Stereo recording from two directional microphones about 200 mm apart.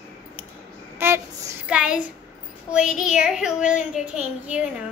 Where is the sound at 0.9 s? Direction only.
10° right (ahead or behind).